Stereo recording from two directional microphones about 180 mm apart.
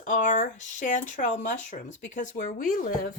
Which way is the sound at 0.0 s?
45° left (ahead or behind).